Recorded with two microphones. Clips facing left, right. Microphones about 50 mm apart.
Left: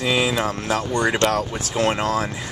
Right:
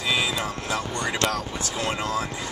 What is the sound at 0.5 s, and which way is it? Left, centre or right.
Speech, left.